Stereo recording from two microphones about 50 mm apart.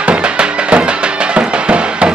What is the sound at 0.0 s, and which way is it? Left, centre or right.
Music, centre.